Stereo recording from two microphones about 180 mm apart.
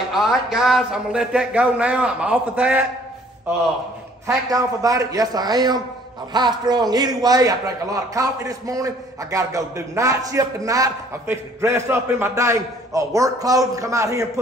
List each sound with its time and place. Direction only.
0.1 s a man's voice: centre (ahead or behind)
4.5 s a man's voice: 20° right (ahead or behind)